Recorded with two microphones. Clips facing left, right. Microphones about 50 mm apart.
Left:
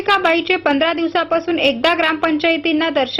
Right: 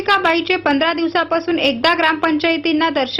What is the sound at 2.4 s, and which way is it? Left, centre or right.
Speech, centre.